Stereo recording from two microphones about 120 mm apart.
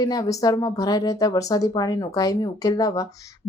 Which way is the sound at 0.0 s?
30° left (ahead or behind).